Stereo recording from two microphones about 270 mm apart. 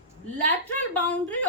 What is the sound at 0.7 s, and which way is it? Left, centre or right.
Speech, centre.